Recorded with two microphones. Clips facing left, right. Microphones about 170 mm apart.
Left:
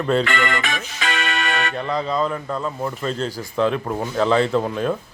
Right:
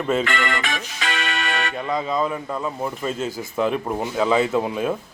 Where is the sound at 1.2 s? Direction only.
60° left (ahead or behind).